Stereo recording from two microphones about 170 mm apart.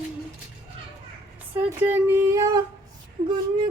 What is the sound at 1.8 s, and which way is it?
Speech, 15° right (ahead or behind).